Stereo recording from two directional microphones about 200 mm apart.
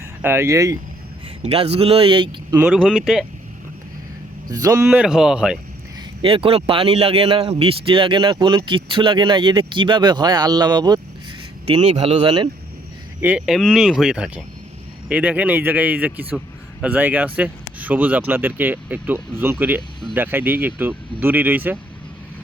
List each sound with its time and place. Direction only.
0.2 s speech: 10° right (ahead or behind)
1.4 s a man's voice: 30° right (ahead or behind)
2.6 s speech: 5° right (ahead or behind)
4.4 s speech: 15° right (ahead or behind)
6.2 s a man's voice: 25° right (ahead or behind)
11.7 s speech: 35° right (ahead or behind)
13.2 s speech: 5° right (ahead or behind)